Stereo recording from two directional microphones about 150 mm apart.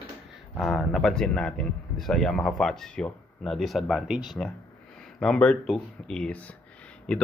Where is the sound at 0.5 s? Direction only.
Centre (ahead or behind).